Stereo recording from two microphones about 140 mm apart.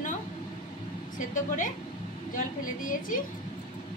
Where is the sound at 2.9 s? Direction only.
75° left (ahead or behind).